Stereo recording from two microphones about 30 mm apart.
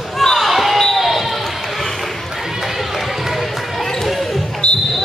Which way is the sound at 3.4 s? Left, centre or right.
Centre.